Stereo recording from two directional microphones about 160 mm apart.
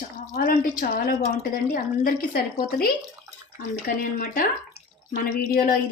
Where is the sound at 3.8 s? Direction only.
60° left (ahead or behind).